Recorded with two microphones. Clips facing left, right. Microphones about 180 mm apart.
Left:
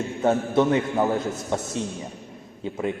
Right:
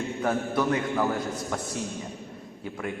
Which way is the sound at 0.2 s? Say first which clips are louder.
Left 7 dB; 25° left (ahead or behind).